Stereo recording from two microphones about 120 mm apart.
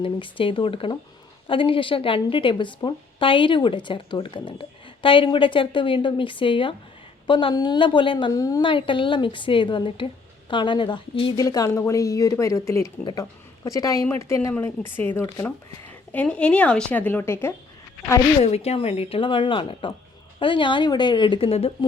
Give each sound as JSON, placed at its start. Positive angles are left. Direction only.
{"t": 0.0, "sound": "a woman's voice", "side_deg": 45}
{"t": 8.3, "sound": "speech", "side_deg": 30}
{"t": 8.6, "sound": "a woman's voice", "side_deg": 45}
{"t": 11.3, "sound": "speech", "side_deg": 30}
{"t": 16.1, "sound": "a woman's voice", "side_deg": 10}
{"t": 18.4, "sound": "a woman's voice", "side_deg": 60}